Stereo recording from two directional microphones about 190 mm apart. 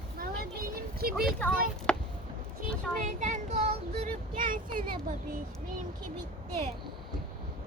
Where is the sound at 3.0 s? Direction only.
40° right (ahead or behind).